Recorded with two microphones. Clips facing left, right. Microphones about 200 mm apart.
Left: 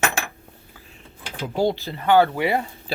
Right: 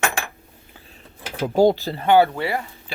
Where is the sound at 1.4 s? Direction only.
45° right (ahead or behind).